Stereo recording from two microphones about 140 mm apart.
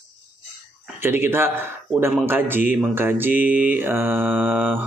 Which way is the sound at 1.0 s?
15° right (ahead or behind).